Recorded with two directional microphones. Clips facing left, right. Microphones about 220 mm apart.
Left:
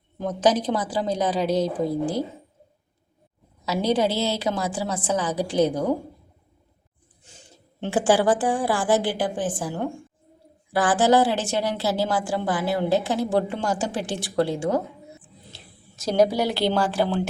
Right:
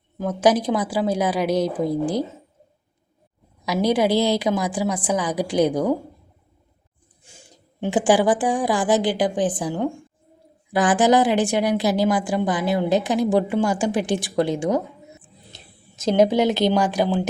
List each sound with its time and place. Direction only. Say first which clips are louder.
0.2 s a woman's voice: right 3 dB; 10° right (ahead or behind)
3.7 s a woman's voice: right 3 dB; 10° right (ahead or behind)
7.3 s a woman's voice: right 1 dB; 10° right (ahead or behind)